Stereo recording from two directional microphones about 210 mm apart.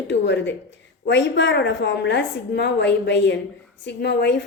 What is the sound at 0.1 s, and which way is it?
A woman's voice, 55° left (ahead or behind).